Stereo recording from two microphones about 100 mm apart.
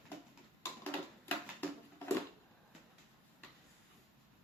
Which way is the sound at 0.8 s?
20° left (ahead or behind).